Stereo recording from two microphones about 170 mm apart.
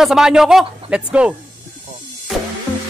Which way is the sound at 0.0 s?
5° right (ahead or behind).